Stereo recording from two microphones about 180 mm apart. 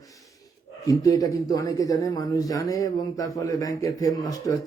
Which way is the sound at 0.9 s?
20° left (ahead or behind).